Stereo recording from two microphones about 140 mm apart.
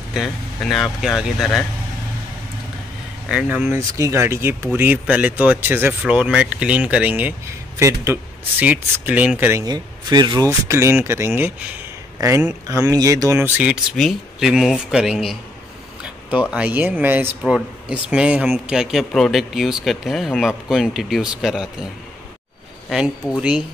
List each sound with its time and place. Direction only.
0.1 s speech: centre (ahead or behind)
3.3 s speech: 10° right (ahead or behind)
3.9 s speech: 20° right (ahead or behind)
9.7 s speech: 30° right (ahead or behind)
10.7 s speech: 20° right (ahead or behind)
13.9 s speech: centre (ahead or behind)
22.8 s speech: centre (ahead or behind)